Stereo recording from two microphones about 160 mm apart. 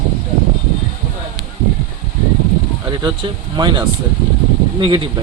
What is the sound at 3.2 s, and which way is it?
Speech, 25° right (ahead or behind).